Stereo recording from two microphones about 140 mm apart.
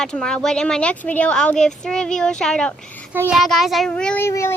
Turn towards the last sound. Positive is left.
turn(degrees=20)  # may be behind; listen again after turning